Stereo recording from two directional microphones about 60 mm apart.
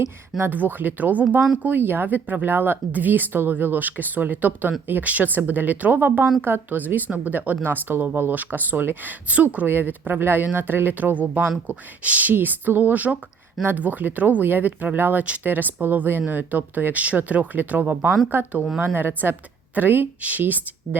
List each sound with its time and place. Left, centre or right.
0.0 s speech: right
0.5 s a woman's voice: right